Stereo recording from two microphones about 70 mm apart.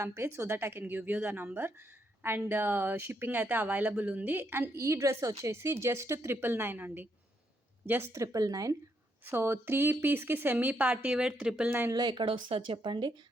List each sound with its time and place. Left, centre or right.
0.0 s a woman's voice: right
8.1 s speech: right
9.2 s a woman's voice: right; by 11.7 s centre
11.9 s speech: right